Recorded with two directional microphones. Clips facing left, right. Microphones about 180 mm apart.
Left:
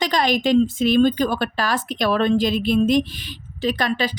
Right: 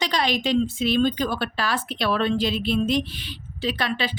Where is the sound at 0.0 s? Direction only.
45° left (ahead or behind).